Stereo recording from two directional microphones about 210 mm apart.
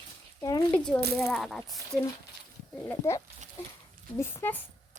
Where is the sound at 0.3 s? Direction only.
15° left (ahead or behind).